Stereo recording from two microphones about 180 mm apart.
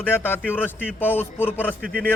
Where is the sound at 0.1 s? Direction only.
10° left (ahead or behind).